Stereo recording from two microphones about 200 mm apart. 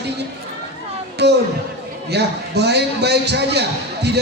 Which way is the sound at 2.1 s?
55° right (ahead or behind).